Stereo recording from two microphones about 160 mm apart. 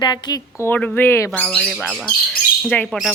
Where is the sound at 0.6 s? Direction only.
5° left (ahead or behind).